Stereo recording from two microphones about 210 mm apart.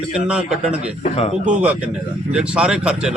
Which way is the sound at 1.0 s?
30° left (ahead or behind).